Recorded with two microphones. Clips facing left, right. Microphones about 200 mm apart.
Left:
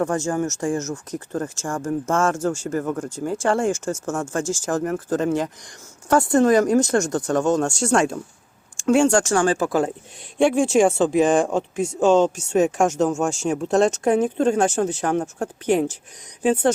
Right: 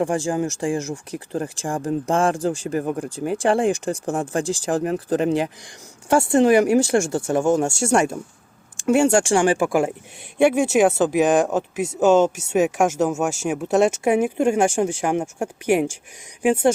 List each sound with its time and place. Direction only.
0.3 s speech: 15° right (ahead or behind)
6.2 s speech: 25° right (ahead or behind)
6.6 s speech: 10° right (ahead or behind)